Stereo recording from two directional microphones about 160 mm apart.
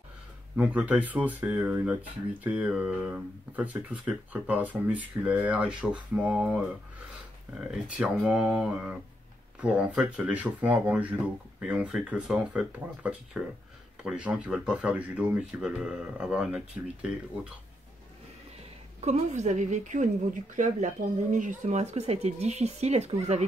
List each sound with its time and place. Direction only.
0.6 s speech: 10° right (ahead or behind)
18.9 s a woman's voice: 45° right (ahead or behind)